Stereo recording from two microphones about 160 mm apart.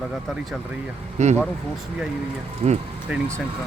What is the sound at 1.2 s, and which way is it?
Speech, 45° right (ahead or behind).